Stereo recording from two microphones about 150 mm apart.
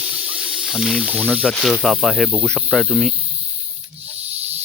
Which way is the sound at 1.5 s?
Centre (ahead or behind).